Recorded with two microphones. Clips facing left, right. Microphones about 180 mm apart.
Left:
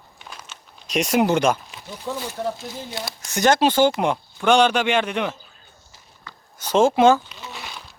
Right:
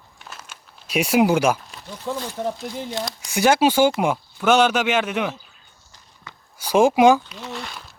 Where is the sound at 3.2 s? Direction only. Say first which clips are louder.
Right 1 dB; 10° right (ahead or behind).